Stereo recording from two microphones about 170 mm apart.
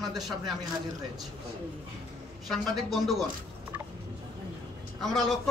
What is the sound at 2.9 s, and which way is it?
Speech, centre (ahead or behind).